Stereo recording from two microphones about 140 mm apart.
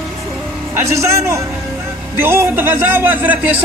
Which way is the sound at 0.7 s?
20° right (ahead or behind).